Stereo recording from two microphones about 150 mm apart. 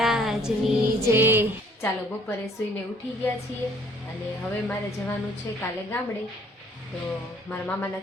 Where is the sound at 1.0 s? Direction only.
15° right (ahead or behind).